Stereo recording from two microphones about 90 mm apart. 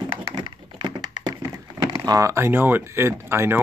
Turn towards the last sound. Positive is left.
turn(degrees=-25)  # may be behind; listen again after turning